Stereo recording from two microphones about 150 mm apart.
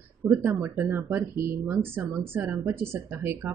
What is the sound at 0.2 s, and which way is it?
Speech, 10° right (ahead or behind).